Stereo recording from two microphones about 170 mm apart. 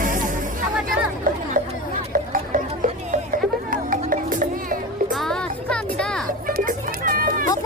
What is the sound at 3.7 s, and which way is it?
Music, 55° right (ahead or behind).